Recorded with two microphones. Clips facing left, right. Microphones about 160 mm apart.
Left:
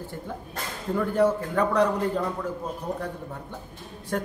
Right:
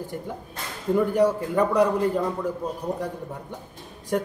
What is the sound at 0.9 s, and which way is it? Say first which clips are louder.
Speech: right 2 dB; 10° right (ahead or behind).